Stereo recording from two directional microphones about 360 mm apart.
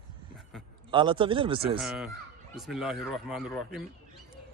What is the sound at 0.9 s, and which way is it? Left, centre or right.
Speech, centre.